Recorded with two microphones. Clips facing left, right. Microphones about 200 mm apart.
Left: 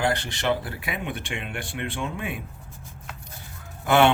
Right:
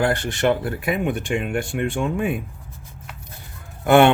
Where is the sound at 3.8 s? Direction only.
55° right (ahead or behind).